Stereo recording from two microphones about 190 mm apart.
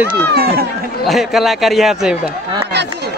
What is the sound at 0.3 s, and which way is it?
Speech, 55° right (ahead or behind).